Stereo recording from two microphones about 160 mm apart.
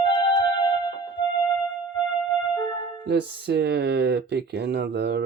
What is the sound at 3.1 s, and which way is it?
Speech, 90° right.